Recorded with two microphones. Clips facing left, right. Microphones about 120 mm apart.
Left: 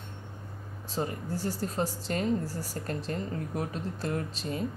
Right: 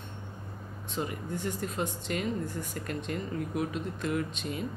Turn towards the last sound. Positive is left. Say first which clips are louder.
# even
turn(degrees=35)  # may be behind; listen again after turning